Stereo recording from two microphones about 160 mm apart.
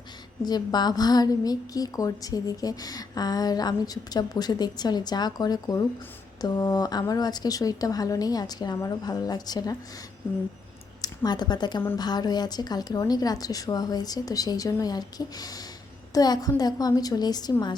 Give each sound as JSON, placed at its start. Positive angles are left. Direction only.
{"t": 0.4, "sound": "a woman's voice", "side_deg": 25}
{"t": 11.0, "sound": "a woman's voice", "side_deg": 25}